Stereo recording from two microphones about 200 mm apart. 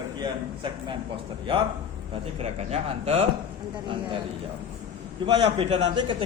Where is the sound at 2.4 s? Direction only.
30° right (ahead or behind).